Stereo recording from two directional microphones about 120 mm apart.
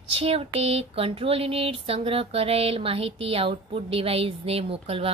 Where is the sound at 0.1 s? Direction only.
55° right (ahead or behind).